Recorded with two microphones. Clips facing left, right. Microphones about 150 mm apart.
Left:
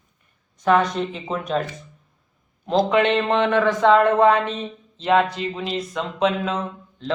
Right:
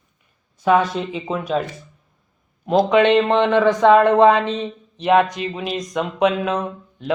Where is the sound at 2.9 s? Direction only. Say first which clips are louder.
Right 6 dB; 15° right (ahead or behind).